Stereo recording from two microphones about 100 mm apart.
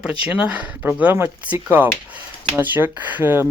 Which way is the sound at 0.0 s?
10° right (ahead or behind).